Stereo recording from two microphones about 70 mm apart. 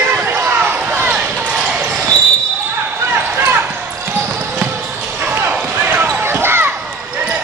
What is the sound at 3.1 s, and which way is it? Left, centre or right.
Basketball bounce, right.